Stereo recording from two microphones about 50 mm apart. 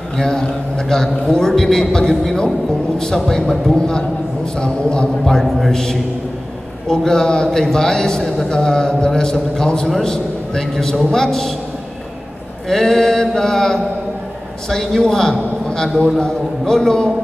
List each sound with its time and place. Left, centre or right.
0.2 s a man's voice: centre
5.2 s a man's voice: centre
7.1 s a man's voice: centre
12.6 s a man's voice: centre